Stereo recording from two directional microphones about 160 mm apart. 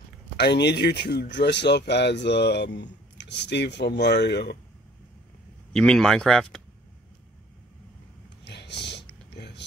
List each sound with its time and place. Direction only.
0.4 s speech: 90° left
5.7 s speech: 5° left (ahead or behind)
8.5 s a sound: 90° left